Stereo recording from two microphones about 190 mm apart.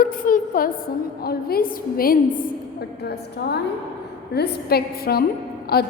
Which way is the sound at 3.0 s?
60° left (ahead or behind).